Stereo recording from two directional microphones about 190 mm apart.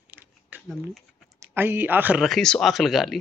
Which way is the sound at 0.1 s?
10° right (ahead or behind).